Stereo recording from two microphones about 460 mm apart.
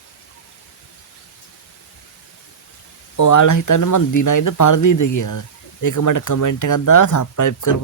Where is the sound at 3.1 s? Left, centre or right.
Left.